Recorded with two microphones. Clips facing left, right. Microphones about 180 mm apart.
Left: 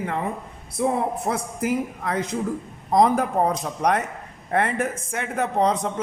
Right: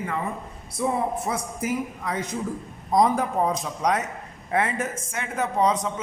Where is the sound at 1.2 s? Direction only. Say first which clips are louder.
Left 3 dB; 60° left (ahead or behind).